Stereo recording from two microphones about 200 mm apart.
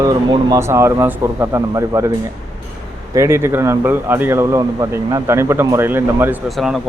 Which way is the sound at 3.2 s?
10° right (ahead or behind).